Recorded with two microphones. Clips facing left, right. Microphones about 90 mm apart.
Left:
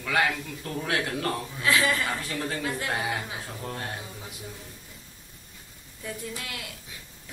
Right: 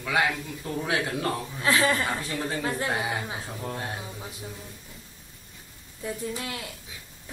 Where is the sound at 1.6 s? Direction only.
30° right (ahead or behind).